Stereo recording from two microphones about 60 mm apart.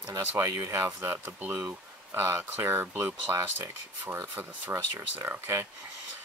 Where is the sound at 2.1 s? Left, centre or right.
Right.